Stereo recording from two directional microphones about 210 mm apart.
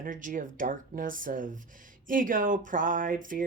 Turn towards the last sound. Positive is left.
turn(degrees=-40)  # may be behind; listen again after turning